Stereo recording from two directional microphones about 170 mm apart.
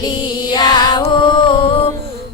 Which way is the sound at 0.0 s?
25° left (ahead or behind).